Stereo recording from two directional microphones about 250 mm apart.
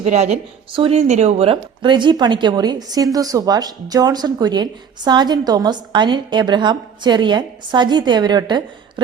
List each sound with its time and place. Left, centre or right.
0.0 s speech: right